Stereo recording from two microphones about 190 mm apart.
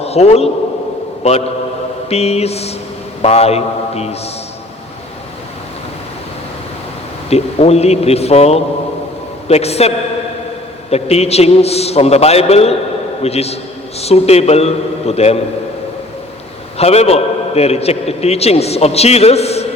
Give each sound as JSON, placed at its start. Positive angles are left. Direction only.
{"t": 0.0, "sound": "a man's voice", "side_deg": 35}
{"t": 7.3, "sound": "a man's voice", "side_deg": 35}
{"t": 16.7, "sound": "a man's voice", "side_deg": 35}